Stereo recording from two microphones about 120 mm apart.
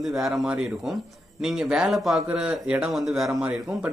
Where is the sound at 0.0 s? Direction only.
Centre (ahead or behind).